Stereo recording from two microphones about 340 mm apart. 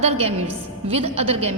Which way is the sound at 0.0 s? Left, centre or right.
Centre.